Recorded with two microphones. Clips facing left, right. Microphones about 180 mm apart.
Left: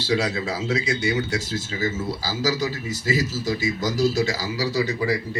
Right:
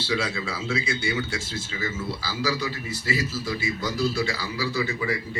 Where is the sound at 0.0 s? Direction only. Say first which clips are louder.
Left 4 dB; 45° left (ahead or behind).